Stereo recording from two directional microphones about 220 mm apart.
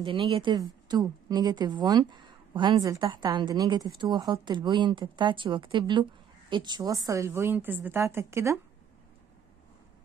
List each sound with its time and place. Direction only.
0.0 s a woman's voice: 25° right (ahead or behind)